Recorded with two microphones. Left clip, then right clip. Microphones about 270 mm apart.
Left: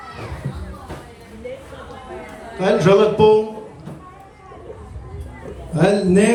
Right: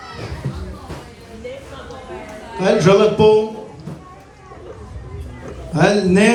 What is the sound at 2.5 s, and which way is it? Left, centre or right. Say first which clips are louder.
Speech: right 1 dB; centre.